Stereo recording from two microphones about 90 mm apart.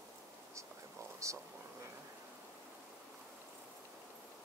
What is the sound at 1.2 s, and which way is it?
Speech, 35° right (ahead or behind).